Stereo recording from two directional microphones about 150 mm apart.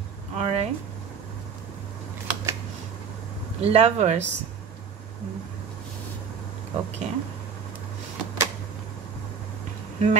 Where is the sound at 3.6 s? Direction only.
45° right (ahead or behind).